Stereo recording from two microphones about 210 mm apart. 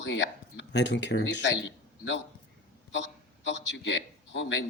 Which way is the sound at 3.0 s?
60° left (ahead or behind).